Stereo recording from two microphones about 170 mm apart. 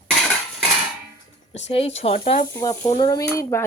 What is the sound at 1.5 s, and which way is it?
Speech, 40° left (ahead or behind).